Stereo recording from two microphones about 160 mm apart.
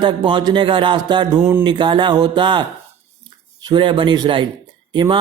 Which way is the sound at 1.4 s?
15° right (ahead or behind).